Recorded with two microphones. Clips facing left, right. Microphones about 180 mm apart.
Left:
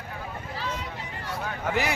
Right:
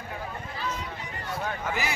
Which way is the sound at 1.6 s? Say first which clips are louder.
Left 7 dB; 60° left (ahead or behind).